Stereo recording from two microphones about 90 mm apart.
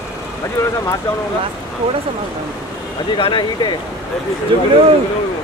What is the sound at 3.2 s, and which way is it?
Speech, 65° left (ahead or behind).